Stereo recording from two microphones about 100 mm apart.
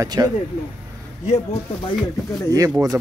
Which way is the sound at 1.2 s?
90° left.